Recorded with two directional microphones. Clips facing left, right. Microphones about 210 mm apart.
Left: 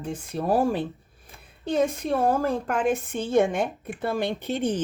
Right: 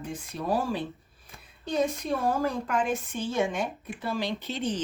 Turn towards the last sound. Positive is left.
turn(degrees=55)  # may be behind; listen again after turning